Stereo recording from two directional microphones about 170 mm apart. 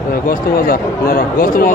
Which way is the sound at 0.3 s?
60° left (ahead or behind).